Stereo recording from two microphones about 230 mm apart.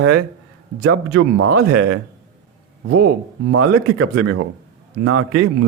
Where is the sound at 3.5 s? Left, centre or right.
Right.